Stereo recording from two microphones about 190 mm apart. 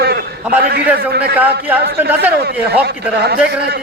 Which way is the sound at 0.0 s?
60° right (ahead or behind).